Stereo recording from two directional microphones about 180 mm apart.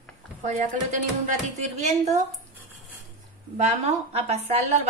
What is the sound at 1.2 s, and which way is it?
A woman's voice, 40° right (ahead or behind).